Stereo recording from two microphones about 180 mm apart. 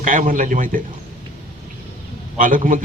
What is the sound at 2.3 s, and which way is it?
Speech, 50° right (ahead or behind).